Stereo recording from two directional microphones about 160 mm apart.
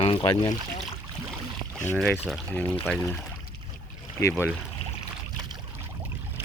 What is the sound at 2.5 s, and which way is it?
Speech, 10° left (ahead or behind).